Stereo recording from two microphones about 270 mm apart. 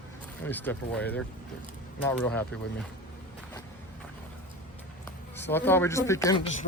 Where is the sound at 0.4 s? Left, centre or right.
Centre.